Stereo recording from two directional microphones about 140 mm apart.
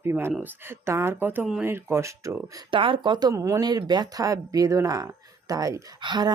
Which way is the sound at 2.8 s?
35° right (ahead or behind).